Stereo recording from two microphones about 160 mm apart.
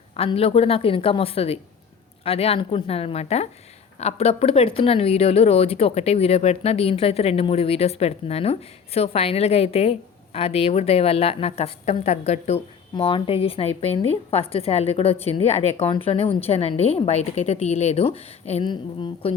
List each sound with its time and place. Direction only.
0.2 s a woman's voice: 35° left (ahead or behind)